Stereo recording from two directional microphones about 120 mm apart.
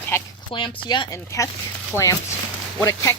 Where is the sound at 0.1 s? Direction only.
20° left (ahead or behind).